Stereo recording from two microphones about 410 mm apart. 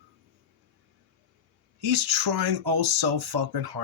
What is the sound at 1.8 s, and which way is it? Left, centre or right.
Speech, right.